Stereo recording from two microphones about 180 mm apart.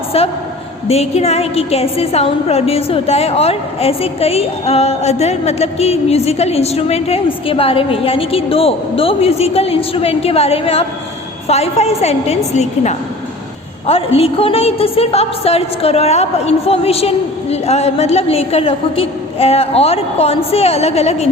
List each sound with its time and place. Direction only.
0.1 s a woman's voice: 35° left (ahead or behind)